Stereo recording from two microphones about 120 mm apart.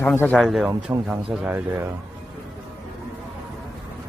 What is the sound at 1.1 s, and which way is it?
Speech, 15° right (ahead or behind).